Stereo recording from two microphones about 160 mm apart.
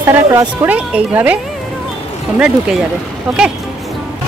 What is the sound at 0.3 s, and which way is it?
Speech, 25° right (ahead or behind).